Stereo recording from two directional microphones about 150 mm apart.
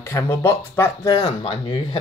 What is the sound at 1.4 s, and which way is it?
Speech, 30° left (ahead or behind).